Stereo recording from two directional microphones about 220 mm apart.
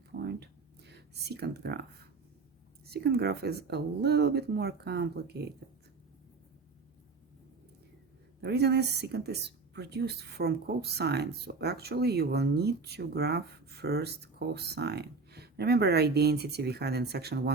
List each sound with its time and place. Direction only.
0.1 s a sound: 50° right (ahead or behind)
0.9 s speech: 50° right (ahead or behind)
2.9 s speech: 45° right (ahead or behind)
8.4 s speech: 50° right (ahead or behind)